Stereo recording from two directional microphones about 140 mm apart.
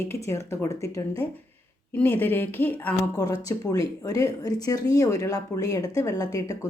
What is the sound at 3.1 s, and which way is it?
Speech, 30° left (ahead or behind).